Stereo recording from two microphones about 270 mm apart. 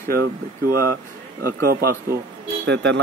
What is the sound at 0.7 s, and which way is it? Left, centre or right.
Speech, right.